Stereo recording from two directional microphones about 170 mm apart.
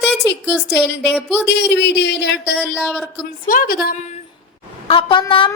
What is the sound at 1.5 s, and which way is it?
Speech, 90° left.